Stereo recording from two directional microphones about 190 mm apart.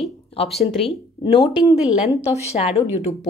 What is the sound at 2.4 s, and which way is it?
Speech, 35° left (ahead or behind).